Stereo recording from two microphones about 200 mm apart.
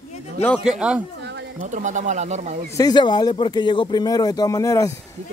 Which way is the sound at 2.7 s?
20° left (ahead or behind).